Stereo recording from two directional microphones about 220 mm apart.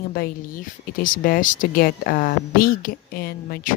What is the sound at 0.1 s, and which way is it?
Speech, 40° left (ahead or behind).